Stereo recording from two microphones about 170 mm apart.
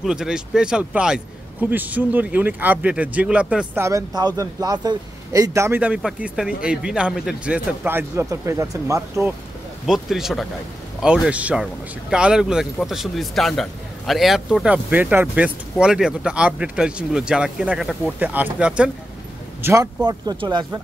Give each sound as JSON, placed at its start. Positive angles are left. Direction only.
{"t": 0.0, "sound": "a man's voice", "side_deg": -5}
{"t": 9.8, "sound": "speech", "side_deg": 0}
{"t": 19.6, "sound": "a man's voice", "side_deg": -20}